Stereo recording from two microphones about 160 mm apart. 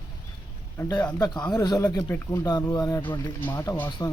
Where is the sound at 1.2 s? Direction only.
25° left (ahead or behind).